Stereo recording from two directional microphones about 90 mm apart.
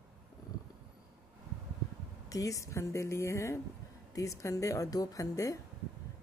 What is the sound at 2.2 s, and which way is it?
Speech, 40° left (ahead or behind).